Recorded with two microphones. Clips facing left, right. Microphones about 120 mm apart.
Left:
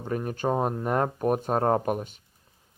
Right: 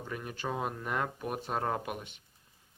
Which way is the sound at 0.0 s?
40° left (ahead or behind).